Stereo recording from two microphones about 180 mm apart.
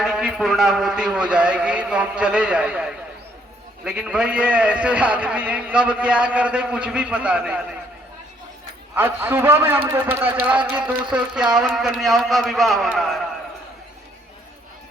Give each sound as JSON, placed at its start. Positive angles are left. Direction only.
{"t": 0.0, "sound": "a man's voice", "side_deg": -5}
{"t": 9.0, "sound": "a man's voice", "side_deg": -10}